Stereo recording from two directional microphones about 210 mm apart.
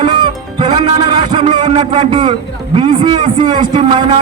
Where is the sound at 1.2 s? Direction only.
25° right (ahead or behind).